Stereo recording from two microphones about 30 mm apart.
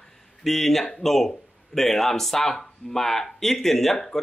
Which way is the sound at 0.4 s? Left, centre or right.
Centre.